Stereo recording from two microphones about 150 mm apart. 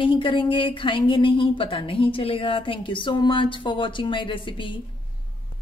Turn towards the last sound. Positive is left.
turn(degrees=35)  # may be behind; listen again after turning